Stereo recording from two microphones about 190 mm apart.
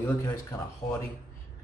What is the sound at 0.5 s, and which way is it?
Speech, 20° left (ahead or behind).